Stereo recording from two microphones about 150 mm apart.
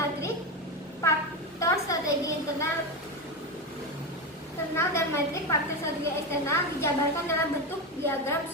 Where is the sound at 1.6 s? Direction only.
20° left (ahead or behind).